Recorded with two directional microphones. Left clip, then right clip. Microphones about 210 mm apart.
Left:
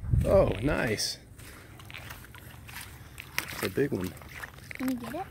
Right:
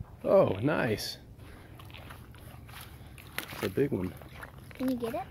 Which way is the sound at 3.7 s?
Centre (ahead or behind).